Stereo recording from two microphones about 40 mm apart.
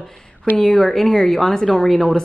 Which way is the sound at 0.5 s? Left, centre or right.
Centre.